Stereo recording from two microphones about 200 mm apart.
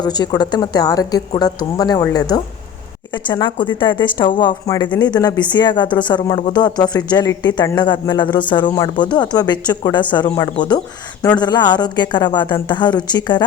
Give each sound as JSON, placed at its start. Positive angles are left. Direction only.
{"t": 0.0, "sound": "speech", "side_deg": 20}